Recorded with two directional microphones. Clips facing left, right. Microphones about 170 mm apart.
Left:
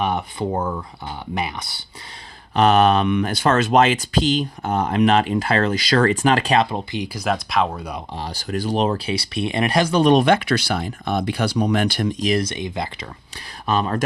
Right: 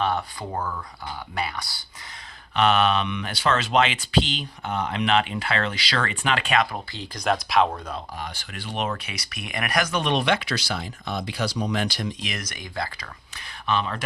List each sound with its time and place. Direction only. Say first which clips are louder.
0.0 s speech: left 3 dB; 20° left (ahead or behind)
2.6 s speech: left 5 dB; 40° left (ahead or behind); by 7.8 s centre (ahead or behind)
8.2 s speech: left 10 dB; 40° left (ahead or behind); by 12.1 s 55° left (ahead or behind)
12.2 s speech: left 13 dB; 30° left (ahead or behind)
13.7 s speech: left 5 dB; 40° left (ahead or behind)